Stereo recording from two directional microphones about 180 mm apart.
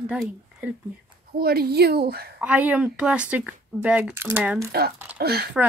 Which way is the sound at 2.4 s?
5° right (ahead or behind).